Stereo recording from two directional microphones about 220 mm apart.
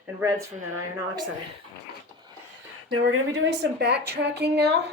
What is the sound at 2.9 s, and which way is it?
Speech, 75° right (ahead or behind).